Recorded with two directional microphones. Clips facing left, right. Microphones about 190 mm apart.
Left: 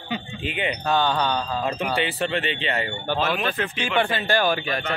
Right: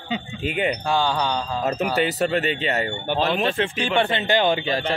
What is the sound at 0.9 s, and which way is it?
Speech, 10° right (ahead or behind).